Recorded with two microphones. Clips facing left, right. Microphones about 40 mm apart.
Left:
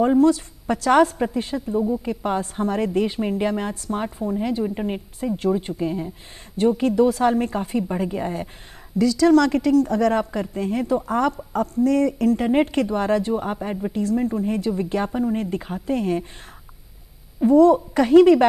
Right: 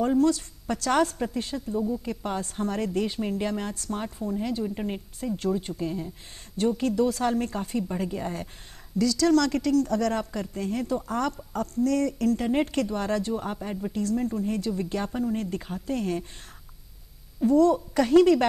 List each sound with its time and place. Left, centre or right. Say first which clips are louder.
0.0 s a woman's voice: left 6 dB; centre
17.4 s a woman's voice: left 6 dB; centre